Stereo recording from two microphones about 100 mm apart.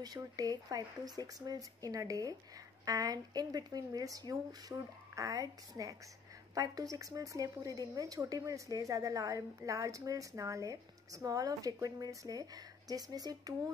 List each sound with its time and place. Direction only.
0.0 s speech: 40° right (ahead or behind)